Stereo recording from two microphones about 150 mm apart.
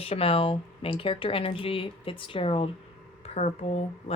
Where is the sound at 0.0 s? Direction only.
40° left (ahead or behind).